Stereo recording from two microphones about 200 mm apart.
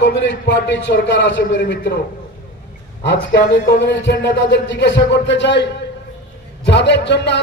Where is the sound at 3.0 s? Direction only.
65° left (ahead or behind).